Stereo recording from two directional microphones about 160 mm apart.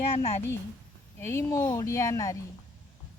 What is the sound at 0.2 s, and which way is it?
Speech, 40° left (ahead or behind).